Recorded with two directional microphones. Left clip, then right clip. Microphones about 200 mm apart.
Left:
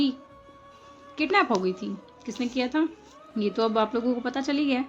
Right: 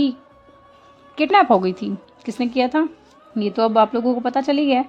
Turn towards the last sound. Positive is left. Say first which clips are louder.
# right 9 dB
turn(degrees=-40)  # may be behind; listen again after turning